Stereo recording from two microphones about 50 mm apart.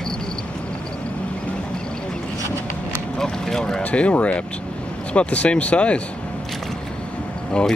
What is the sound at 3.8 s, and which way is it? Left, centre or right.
Speech, left.